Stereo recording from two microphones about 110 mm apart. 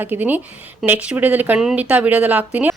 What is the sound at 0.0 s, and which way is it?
Speech, 15° right (ahead or behind).